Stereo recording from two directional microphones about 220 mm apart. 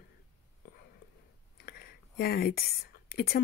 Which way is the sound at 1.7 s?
45° left (ahead or behind).